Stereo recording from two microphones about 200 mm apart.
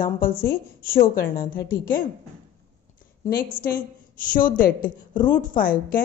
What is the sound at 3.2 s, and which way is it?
A woman's voice, 45° left (ahead or behind).